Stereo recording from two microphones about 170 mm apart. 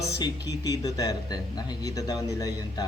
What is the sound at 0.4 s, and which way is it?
Speech, 20° left (ahead or behind).